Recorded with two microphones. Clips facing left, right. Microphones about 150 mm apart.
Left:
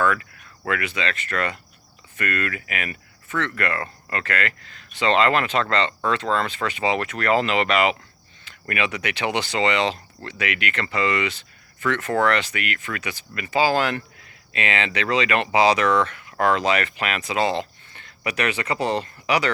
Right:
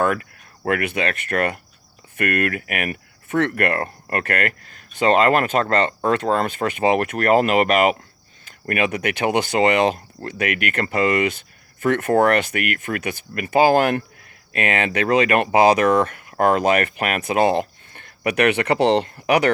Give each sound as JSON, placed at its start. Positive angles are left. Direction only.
{"t": 0.0, "sound": "speech", "side_deg": -50}